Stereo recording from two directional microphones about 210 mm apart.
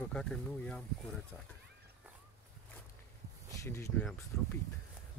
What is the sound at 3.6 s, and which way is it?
Speech, 15° left (ahead or behind).